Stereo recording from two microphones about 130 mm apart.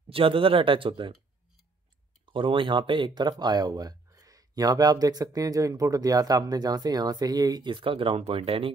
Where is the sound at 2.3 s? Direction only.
40° right (ahead or behind).